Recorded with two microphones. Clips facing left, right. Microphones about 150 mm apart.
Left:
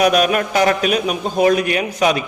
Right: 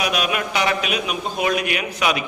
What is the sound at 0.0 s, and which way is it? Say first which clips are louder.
A man's voice: left 8 dB; 45° left (ahead or behind).